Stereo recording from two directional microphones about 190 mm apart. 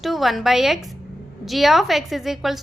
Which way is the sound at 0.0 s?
Centre (ahead or behind).